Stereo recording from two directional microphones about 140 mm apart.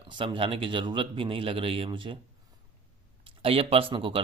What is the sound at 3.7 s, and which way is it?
Speech, 40° right (ahead or behind).